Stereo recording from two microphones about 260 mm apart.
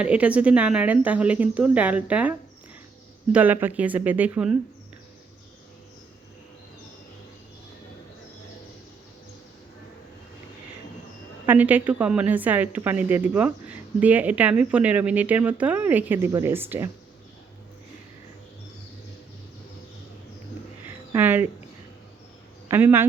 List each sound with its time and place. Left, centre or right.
0.0 s speech: centre
3.3 s a woman's voice: centre
11.4 s a woman's voice: centre
20.8 s a sound: centre
22.7 s a woman's voice: centre